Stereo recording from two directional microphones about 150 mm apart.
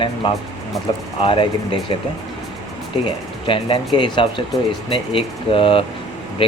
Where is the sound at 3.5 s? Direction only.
35° left (ahead or behind).